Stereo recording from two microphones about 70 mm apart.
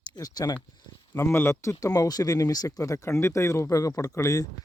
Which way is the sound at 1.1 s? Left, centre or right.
Left.